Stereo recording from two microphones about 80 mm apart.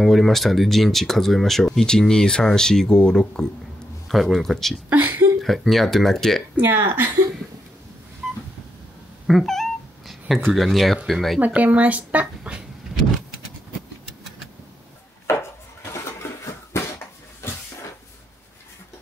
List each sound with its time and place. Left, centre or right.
0.0 s speech: centre
4.8 s speech: right
5.4 s speech: centre
6.6 s speech: right
8.2 s a sound: centre
9.3 s cat: centre
10.5 s speech: centre
11.3 s speech: centre
15.2 s chopping: left
16.0 s a sound: left